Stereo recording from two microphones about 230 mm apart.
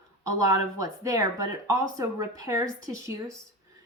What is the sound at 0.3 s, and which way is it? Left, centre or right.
Speech, centre.